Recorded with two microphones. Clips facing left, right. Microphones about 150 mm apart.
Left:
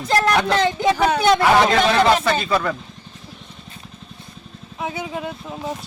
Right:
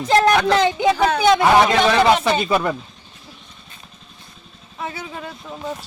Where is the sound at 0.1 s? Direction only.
25° right (ahead or behind).